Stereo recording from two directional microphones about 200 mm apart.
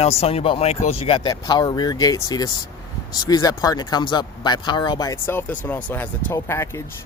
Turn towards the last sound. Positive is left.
turn(degrees=10)  # may be behind; listen again after turning